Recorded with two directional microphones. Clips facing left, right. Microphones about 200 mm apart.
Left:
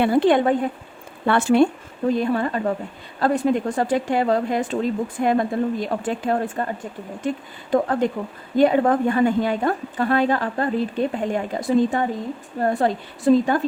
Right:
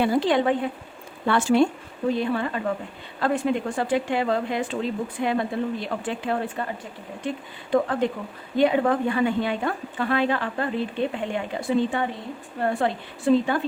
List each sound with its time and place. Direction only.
0.0 s speech: 60° left (ahead or behind)
2.1 s speech: 45° left (ahead or behind)
7.7 s a woman's voice: 40° left (ahead or behind)